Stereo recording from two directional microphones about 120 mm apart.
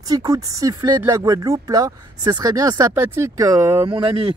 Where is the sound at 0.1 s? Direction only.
30° right (ahead or behind).